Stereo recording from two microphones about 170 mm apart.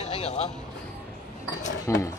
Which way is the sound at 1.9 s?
15° left (ahead or behind).